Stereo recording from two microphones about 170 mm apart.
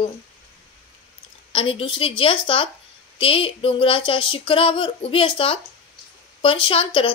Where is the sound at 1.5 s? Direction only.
30° left (ahead or behind).